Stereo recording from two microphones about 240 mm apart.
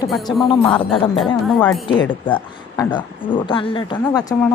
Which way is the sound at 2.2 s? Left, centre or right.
Centre.